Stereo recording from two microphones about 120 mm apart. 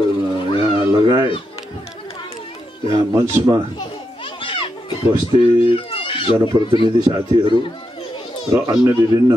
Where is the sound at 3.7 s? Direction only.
45° left (ahead or behind).